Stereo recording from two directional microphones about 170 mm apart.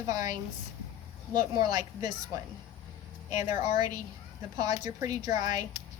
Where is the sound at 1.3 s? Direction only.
25° right (ahead or behind).